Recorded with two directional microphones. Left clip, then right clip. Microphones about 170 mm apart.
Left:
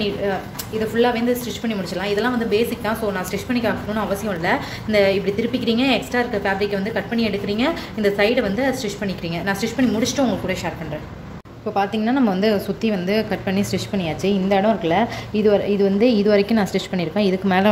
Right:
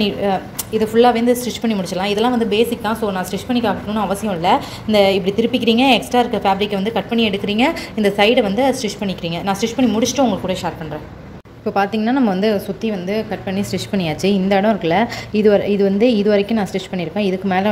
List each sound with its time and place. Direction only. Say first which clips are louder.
0.0 s a woman's voice: right 4 dB; 30° right (ahead or behind); by 13.7 s 5° left (ahead or behind)
13.7 s a woman's voice: right 3 dB; 10° right (ahead or behind); by 17.6 s 5° left (ahead or behind)